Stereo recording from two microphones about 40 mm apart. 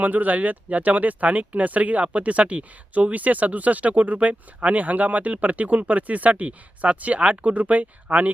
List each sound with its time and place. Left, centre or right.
0.0 s speech: right